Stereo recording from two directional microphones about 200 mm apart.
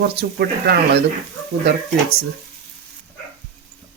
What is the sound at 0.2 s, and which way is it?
Speech, 55° right (ahead or behind).